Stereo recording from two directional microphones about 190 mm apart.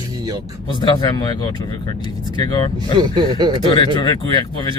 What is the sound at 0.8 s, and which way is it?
Speech, 25° left (ahead or behind).